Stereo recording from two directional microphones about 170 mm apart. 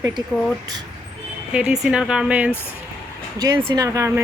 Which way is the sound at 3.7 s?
20° right (ahead or behind).